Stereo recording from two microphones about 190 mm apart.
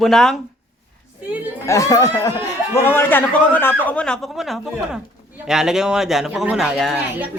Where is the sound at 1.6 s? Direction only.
15° left (ahead or behind); by 7.0 s centre (ahead or behind).